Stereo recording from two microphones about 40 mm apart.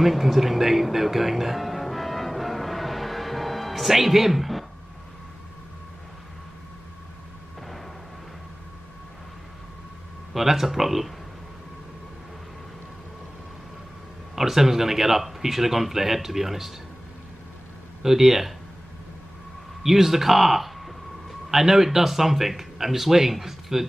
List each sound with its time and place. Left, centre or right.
0.0 s music: centre
10.3 s speech: centre
14.3 s speech: centre
18.0 s speech: centre
19.8 s a man's voice: centre